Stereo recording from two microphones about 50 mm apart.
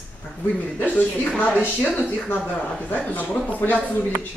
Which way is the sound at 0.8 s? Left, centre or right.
Left.